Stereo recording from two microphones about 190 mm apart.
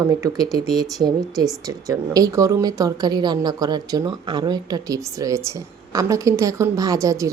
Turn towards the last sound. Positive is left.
turn(degrees=-15)  # may be behind; listen again after turning